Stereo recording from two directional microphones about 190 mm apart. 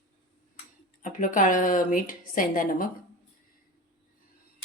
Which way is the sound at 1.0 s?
45° left (ahead or behind).